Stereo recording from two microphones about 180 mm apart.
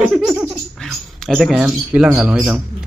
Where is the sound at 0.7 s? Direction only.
Centre (ahead or behind).